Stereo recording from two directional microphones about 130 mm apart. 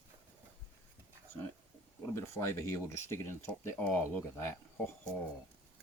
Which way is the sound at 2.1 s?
20° left (ahead or behind).